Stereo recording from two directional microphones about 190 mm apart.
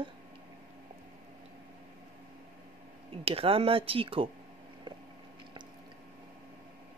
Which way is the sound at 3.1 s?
30° right (ahead or behind).